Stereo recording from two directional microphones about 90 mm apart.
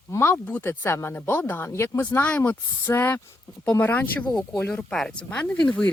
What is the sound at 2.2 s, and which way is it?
Speech, 15° left (ahead or behind).